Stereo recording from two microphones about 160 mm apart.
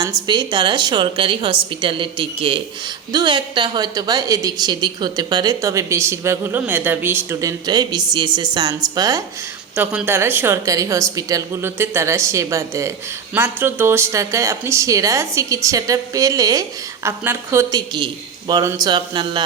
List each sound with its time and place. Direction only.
0.3 s a woman's voice: 30° right (ahead or behind)
9.7 s a woman's voice: 10° right (ahead or behind); by 19.5 s 30° right (ahead or behind)